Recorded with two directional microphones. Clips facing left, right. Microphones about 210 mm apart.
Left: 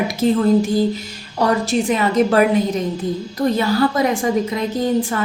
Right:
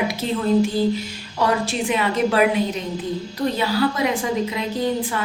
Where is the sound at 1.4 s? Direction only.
40° left (ahead or behind).